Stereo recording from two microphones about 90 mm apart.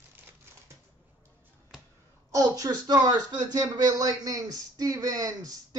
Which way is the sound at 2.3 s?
40° right (ahead or behind).